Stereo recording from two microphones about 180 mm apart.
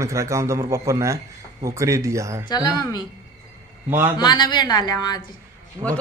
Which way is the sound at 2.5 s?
20° left (ahead or behind).